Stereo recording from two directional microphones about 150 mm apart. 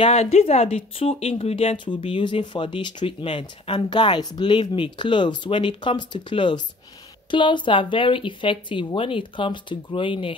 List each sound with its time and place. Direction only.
0.0 s speech: 45° left (ahead or behind)